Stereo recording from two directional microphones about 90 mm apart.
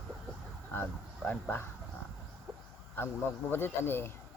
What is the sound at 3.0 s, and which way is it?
Speech, 25° left (ahead or behind).